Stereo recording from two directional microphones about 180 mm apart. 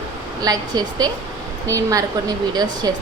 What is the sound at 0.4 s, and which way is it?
Speech, 20° right (ahead or behind).